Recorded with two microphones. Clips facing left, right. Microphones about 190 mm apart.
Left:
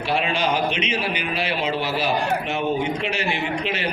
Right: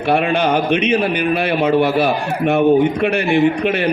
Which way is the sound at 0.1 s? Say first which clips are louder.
Right 7 dB; 55° right (ahead or behind).